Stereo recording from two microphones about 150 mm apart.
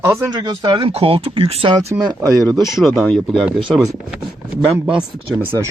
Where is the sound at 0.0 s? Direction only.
15° right (ahead or behind).